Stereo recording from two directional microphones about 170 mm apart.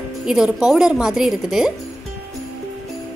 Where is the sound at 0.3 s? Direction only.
5° right (ahead or behind).